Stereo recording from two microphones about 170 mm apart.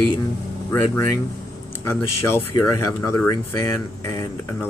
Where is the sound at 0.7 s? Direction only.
15° left (ahead or behind).